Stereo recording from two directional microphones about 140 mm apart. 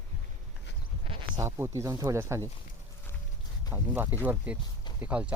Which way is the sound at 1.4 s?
20° right (ahead or behind).